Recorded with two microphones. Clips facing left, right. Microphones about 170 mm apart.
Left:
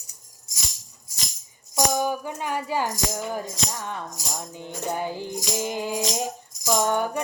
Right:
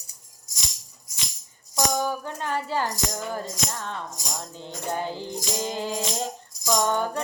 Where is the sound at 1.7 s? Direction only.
10° left (ahead or behind).